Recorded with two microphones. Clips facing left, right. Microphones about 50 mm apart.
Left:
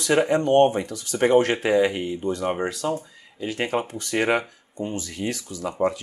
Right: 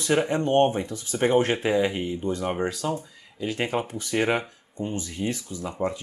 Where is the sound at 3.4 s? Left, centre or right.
Left.